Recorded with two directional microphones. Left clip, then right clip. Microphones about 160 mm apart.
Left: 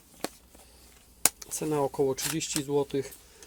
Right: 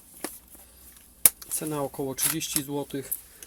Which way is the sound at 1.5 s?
30° left (ahead or behind).